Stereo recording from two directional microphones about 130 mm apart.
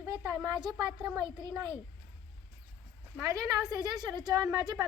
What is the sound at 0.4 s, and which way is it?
A woman's voice, 30° right (ahead or behind).